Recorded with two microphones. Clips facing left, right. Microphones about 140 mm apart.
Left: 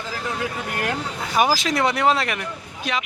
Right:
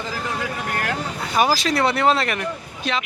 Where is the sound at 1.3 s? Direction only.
20° left (ahead or behind).